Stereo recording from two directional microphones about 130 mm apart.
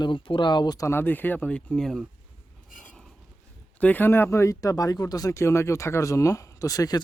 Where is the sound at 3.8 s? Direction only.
10° left (ahead or behind).